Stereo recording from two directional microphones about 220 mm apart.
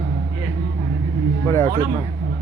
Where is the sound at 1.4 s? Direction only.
10° left (ahead or behind).